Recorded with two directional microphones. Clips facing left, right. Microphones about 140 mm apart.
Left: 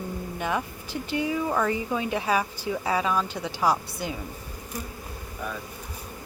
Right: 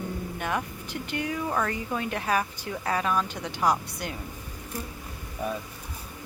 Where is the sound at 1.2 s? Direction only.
10° left (ahead or behind).